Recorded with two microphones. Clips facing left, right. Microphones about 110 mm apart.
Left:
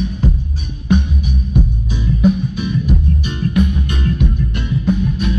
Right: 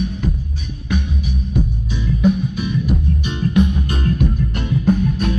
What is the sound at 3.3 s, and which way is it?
Music, 20° right (ahead or behind).